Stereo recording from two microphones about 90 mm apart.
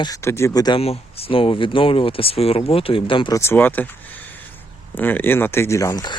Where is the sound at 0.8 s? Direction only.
90° left; by 3.3 s 70° left (ahead or behind).